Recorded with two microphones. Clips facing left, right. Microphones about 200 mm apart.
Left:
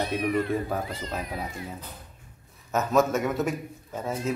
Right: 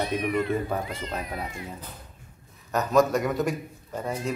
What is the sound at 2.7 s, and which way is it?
Speech, 5° left (ahead or behind).